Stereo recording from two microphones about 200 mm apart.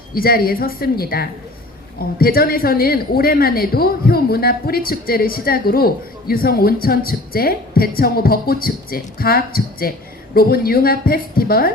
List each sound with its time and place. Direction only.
0.1 s a woman's voice: 50° left (ahead or behind)